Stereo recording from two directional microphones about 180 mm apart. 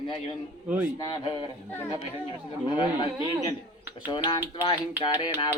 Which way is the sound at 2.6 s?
25° left (ahead or behind).